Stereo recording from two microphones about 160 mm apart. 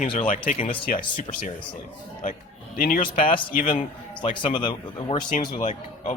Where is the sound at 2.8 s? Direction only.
65° left (ahead or behind).